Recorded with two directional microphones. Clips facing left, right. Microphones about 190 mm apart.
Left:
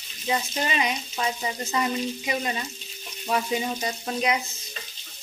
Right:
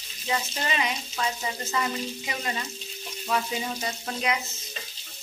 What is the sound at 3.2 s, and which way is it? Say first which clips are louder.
Speech: left 3 dB; 20° left (ahead or behind).